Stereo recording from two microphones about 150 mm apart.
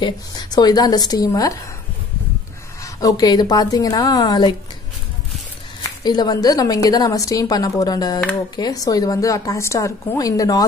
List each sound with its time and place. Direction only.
0.0 s a woman's voice: 30° left (ahead or behind)
2.8 s a woman's voice: 25° left (ahead or behind)
6.0 s a woman's voice: 25° left (ahead or behind)